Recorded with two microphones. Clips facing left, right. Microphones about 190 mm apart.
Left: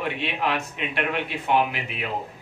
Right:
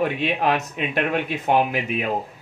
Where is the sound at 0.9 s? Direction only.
45° right (ahead or behind).